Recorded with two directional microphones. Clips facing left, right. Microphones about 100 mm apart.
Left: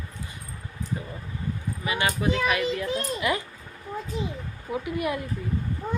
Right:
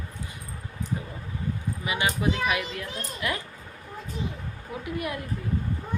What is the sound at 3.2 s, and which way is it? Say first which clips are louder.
Speech: left 3 dB; 5° left (ahead or behind).